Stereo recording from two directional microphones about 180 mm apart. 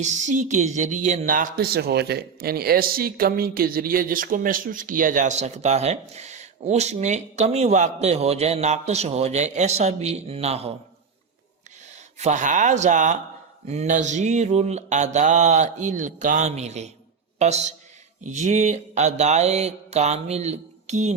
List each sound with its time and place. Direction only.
0.0 s speech: 40° right (ahead or behind)
12.2 s speech: 45° right (ahead or behind)